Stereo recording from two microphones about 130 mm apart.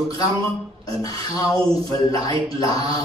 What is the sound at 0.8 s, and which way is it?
A man's voice, 30° left (ahead or behind).